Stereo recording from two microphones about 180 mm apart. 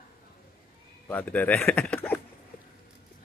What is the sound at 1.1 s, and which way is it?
Speech, 10° left (ahead or behind).